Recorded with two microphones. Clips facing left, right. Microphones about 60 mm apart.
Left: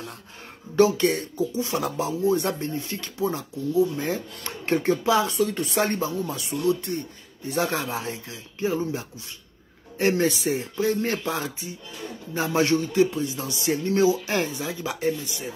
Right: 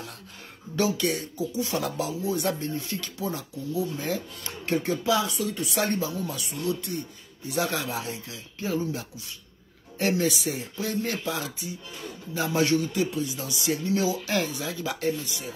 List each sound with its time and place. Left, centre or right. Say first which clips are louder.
0.7 s speech: left 6 dB; left